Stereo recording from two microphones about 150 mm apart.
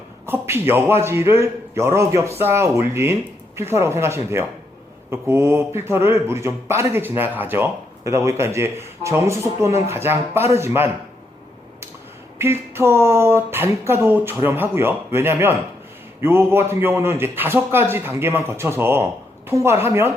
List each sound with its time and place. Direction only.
0.3 s speech: 15° right (ahead or behind)
12.4 s speech: 15° right (ahead or behind)